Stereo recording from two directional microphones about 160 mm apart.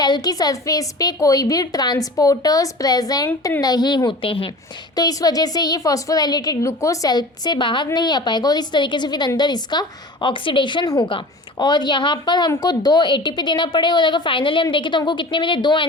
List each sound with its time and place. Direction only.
0.0 s a woman's voice: 25° left (ahead or behind)
4.9 s a woman's voice: 25° left (ahead or behind)